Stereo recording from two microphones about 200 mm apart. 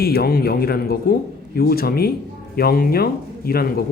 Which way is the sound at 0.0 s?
50° left (ahead or behind).